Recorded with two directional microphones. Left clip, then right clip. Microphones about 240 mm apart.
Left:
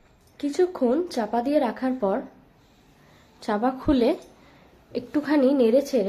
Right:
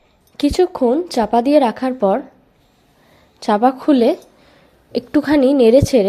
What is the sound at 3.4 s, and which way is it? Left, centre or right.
A woman's voice, right.